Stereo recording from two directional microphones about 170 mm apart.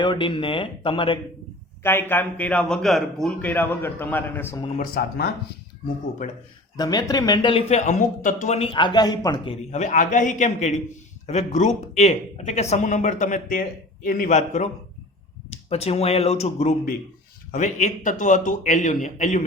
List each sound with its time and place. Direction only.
0.0 s speech: 30° left (ahead or behind)
1.8 s a man's voice: 15° left (ahead or behind)
4.8 s speech: 65° left (ahead or behind)
6.7 s speech: 25° left (ahead or behind); by 19.5 s 45° left (ahead or behind)